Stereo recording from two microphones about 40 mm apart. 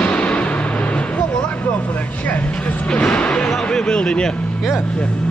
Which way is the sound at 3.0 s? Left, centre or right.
Left.